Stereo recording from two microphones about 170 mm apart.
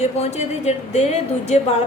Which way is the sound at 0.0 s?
40° left (ahead or behind).